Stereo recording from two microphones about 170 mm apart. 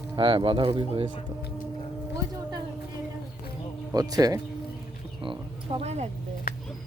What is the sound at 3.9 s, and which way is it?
Speech, 20° right (ahead or behind).